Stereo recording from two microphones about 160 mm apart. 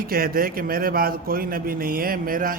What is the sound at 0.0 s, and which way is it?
A man's voice, 65° right (ahead or behind).